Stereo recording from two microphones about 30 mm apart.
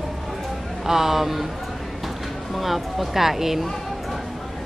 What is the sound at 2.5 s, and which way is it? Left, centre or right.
A woman's voice, centre.